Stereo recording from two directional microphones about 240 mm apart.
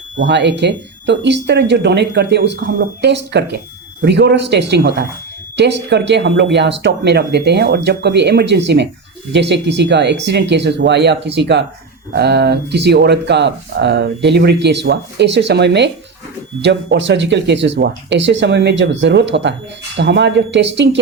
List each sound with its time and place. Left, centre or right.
0.2 s speech: right